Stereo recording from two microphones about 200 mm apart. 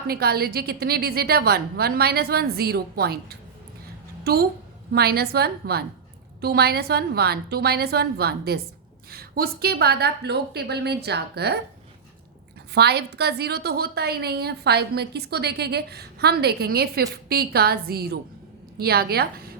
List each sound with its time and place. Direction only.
0.1 s a woman's voice: 50° right (ahead or behind)
12.7 s a woman's voice: 55° right (ahead or behind)